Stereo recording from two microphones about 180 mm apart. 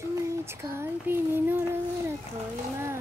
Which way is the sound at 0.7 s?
15° right (ahead or behind).